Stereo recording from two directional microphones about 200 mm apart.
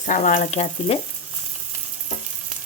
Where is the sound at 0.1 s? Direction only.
40° left (ahead or behind).